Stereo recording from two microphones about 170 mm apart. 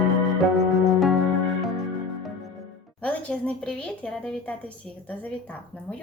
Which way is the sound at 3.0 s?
5° left (ahead or behind).